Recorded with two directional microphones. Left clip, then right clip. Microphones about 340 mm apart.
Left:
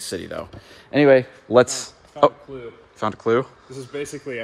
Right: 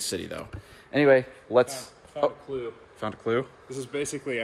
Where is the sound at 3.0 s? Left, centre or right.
Centre.